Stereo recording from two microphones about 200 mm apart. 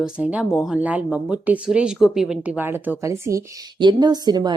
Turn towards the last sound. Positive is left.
turn(degrees=-20)  # may be behind; listen again after turning